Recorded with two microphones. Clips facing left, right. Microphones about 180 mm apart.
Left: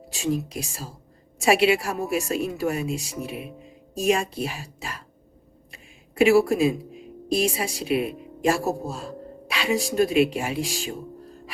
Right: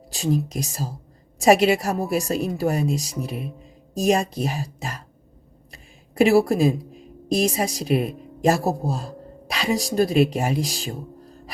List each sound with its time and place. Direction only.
0.1 s a woman's voice: 35° right (ahead or behind)